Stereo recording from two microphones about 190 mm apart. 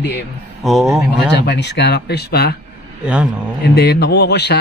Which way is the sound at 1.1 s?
60° left (ahead or behind).